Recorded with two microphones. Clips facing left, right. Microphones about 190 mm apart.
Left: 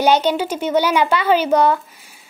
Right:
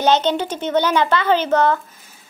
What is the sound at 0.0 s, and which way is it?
A woman's voice, 10° left (ahead or behind).